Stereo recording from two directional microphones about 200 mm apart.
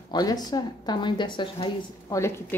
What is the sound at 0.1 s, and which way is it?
A woman's voice, 20° left (ahead or behind).